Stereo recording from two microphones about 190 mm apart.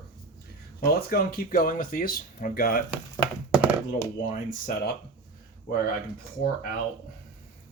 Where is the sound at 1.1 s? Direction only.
50° left (ahead or behind).